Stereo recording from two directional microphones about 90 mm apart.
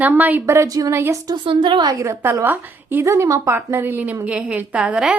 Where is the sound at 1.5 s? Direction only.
65° right (ahead or behind).